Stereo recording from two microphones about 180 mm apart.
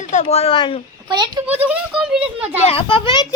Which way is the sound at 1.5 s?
10° right (ahead or behind).